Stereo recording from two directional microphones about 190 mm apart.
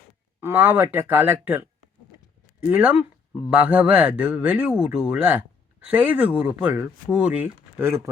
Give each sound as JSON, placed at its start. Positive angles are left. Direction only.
{"t": 0.3, "sound": "speech", "side_deg": -10}